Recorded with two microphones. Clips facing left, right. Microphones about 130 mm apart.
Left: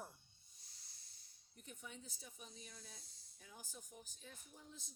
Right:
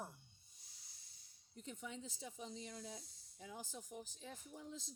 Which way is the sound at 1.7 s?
90° right.